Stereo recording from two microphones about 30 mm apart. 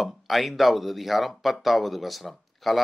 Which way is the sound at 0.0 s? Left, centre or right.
Centre.